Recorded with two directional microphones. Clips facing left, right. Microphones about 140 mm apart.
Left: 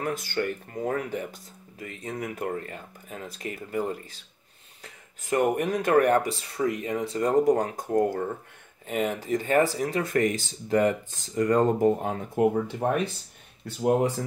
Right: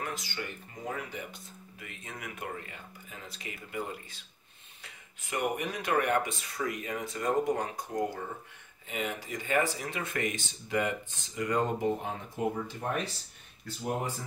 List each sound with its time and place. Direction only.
0.0 s speech: 50° left (ahead or behind)
1.8 s speech: 40° left (ahead or behind)
4.8 s speech: 45° left (ahead or behind); by 13.1 s 70° left (ahead or behind)